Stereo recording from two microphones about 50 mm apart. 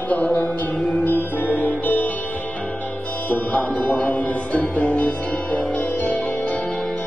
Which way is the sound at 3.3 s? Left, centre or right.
Left.